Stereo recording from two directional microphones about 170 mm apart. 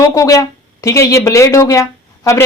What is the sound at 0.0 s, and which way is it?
A woman's voice, 20° left (ahead or behind).